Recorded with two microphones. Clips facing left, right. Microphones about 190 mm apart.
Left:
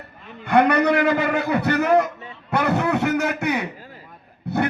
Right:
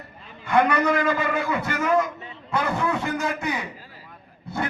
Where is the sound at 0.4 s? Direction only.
65° left (ahead or behind).